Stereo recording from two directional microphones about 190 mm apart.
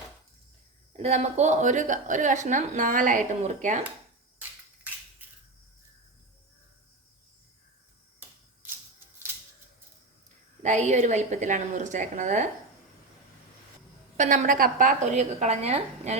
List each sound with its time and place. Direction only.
0.9 s a woman's voice: 35° right (ahead or behind)
10.6 s a woman's voice: 40° right (ahead or behind)
14.2 s a woman's voice: 45° right (ahead or behind)